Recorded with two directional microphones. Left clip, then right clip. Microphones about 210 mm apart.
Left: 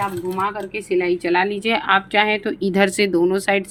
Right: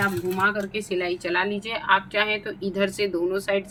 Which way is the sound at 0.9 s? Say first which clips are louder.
Left 9 dB; 30° left (ahead or behind).